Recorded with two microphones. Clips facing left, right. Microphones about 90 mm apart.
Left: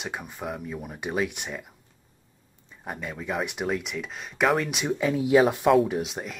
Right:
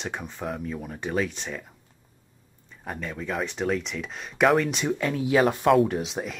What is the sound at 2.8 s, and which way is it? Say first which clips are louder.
Speech: right 1 dB; 10° left (ahead or behind).